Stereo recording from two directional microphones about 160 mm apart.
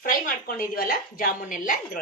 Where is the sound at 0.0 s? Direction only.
60° left (ahead or behind).